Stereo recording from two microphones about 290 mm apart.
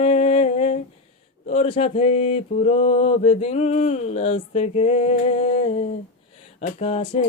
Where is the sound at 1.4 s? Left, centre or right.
Left.